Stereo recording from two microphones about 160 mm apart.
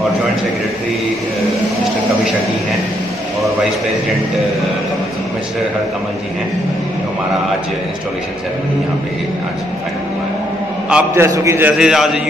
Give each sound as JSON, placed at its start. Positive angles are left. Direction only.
{"t": 10.9, "sound": "a man's voice", "side_deg": -5}
{"t": 11.2, "sound": "a man's voice", "side_deg": -15}
{"t": 11.8, "sound": "a man's voice", "side_deg": 0}